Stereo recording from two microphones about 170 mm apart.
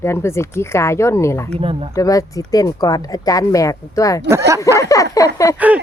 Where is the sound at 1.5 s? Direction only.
35° right (ahead or behind).